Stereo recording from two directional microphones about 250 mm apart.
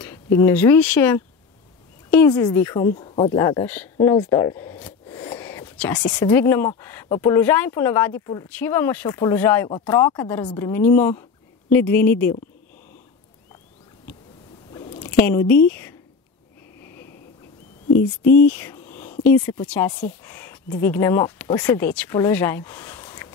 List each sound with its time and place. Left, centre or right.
0.0 s speech: centre
2.0 s a sound: centre
2.3 s speech: centre
2.8 s speech: left; by 5.1 s centre
5.2 s whispering: centre
6.0 s speech: centre
9.7 s speech: left
14.7 s squish: centre
15.2 s speech: centre
18.3 s a sound: centre
19.2 s speech: centre